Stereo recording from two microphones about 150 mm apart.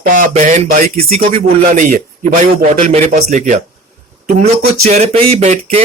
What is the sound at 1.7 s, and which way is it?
A man's voice, 65° right (ahead or behind).